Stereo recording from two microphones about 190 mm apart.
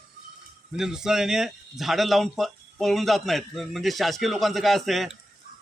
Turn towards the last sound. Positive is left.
turn(degrees=0)  # may be behind; listen again after turning